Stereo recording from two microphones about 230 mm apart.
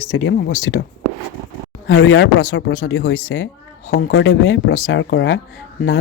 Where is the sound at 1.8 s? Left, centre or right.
Left.